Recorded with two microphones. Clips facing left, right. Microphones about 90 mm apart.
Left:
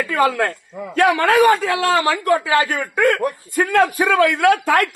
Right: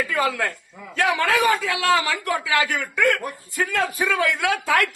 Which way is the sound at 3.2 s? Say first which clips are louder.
Left 7 dB; 50° left (ahead or behind).